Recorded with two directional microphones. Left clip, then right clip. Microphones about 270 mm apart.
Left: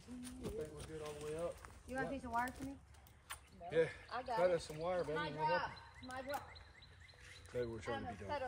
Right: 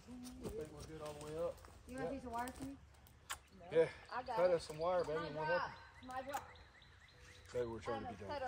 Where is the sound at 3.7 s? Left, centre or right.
Centre.